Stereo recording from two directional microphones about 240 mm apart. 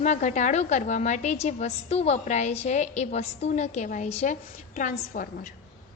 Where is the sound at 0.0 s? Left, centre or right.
Left.